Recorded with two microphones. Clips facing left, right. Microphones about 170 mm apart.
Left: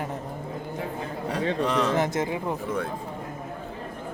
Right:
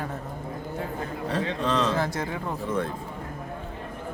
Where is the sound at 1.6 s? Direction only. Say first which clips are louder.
Left 1 dB; 10° left (ahead or behind).